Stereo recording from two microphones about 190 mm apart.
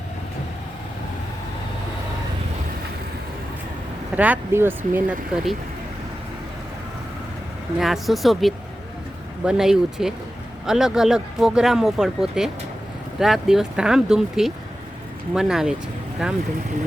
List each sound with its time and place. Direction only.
4.2 s speech: 10° right (ahead or behind)
7.8 s speech: centre (ahead or behind)